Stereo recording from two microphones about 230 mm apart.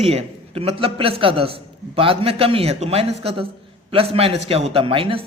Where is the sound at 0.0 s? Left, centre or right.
Right.